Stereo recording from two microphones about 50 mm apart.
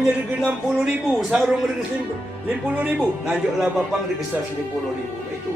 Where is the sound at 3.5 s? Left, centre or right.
Centre.